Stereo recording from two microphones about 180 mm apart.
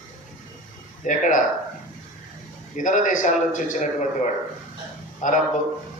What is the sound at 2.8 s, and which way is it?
A man's voice, 45° left (ahead or behind).